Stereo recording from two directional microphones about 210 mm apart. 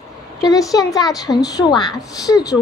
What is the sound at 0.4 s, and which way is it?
A woman's voice, 15° left (ahead or behind).